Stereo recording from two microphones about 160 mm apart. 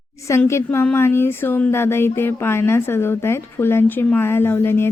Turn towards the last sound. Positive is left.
turn(degrees=15)  # may be behind; listen again after turning